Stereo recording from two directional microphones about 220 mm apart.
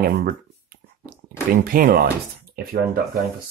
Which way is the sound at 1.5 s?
40° right (ahead or behind).